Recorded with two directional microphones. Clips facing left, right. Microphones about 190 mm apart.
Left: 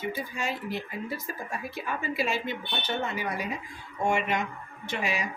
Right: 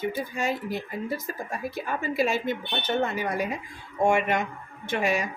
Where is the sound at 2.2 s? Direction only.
45° right (ahead or behind).